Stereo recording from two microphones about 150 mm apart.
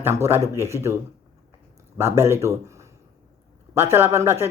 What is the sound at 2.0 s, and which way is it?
A woman's voice, 15° right (ahead or behind).